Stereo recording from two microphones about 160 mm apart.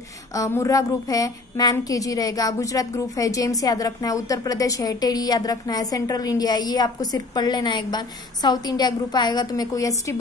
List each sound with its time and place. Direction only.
0.3 s a woman's voice: 20° left (ahead or behind)